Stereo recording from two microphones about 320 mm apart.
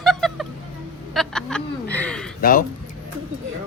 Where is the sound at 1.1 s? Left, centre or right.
Centre.